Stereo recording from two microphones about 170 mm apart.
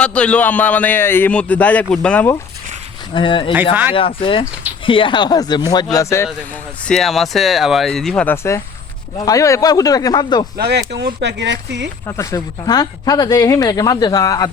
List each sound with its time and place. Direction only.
0.0 s a man's voice: 5° left (ahead or behind)
3.2 s speech: 30° left (ahead or behind)
6.8 s speech: centre (ahead or behind); by 10.4 s 25° left (ahead or behind)
10.6 s speech: 75° right (ahead or behind); by 11.9 s 90° right
12.0 s speech: 20° left (ahead or behind)